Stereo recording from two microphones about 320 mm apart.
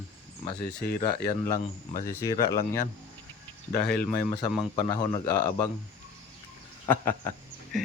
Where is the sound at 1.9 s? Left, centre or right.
Left.